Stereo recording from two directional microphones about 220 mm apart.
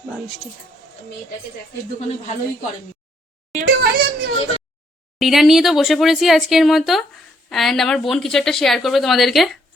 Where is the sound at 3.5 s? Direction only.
35° right (ahead or behind).